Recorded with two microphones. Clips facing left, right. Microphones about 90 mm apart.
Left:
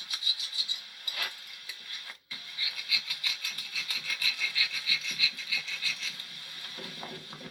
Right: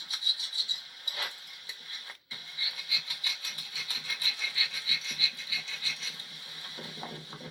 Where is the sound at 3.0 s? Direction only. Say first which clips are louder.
Left 1 dB; 25° right (ahead or behind).